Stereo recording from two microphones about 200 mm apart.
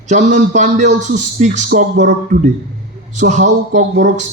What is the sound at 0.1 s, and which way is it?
A man's voice, 35° right (ahead or behind).